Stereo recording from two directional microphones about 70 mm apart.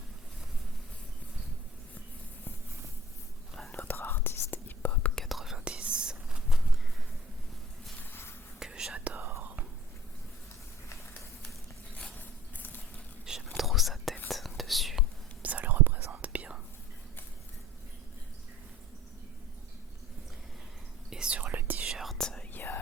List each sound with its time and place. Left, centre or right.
3.7 s whispering: left
5.1 s whispering: centre
5.6 s whispering: centre
8.5 s whispering: centre
9.0 s whispering: right
12.5 s clip-clop: left
13.6 s whispering: centre
15.4 s whispering: right
21.1 s whispering: centre
21.8 s whispering: centre
22.2 s whispering: centre
22.5 s whispering: left